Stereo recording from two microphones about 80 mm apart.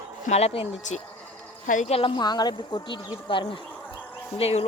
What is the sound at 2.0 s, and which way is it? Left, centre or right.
Speech, left.